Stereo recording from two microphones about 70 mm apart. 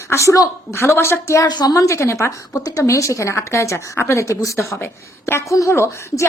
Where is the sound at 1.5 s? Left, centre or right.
Left.